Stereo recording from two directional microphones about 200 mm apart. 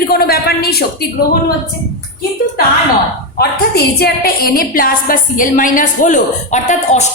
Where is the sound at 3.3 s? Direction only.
55° left (ahead or behind); by 7.1 s 35° left (ahead or behind).